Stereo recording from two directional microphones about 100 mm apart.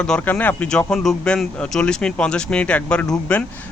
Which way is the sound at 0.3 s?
15° left (ahead or behind).